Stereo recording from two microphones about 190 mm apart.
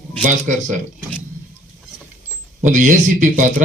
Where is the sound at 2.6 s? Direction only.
40° right (ahead or behind).